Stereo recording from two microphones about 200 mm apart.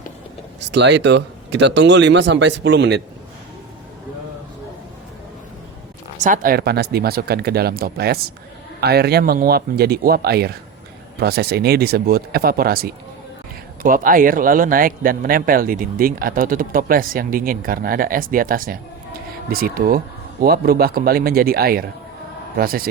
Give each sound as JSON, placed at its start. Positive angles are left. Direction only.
{"t": 0.7, "sound": "speech", "side_deg": -60}
{"t": 6.1, "sound": "speech", "side_deg": -40}